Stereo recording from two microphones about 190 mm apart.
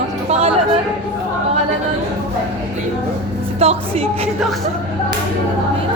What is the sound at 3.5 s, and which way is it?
Speech, 30° right (ahead or behind).